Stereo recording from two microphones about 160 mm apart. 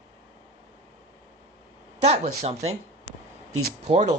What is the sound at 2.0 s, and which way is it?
Speech, 45° right (ahead or behind).